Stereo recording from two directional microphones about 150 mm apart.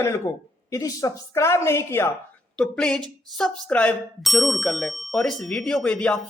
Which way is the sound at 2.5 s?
5° left (ahead or behind).